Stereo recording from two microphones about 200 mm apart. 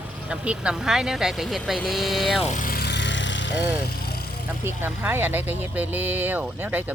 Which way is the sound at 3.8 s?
50° left (ahead or behind).